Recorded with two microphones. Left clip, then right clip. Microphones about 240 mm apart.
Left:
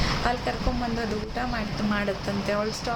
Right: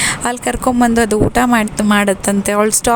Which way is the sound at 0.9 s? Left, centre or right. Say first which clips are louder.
Right 17 dB; right.